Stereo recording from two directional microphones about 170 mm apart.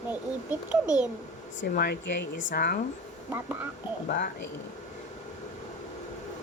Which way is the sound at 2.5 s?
65° left (ahead or behind).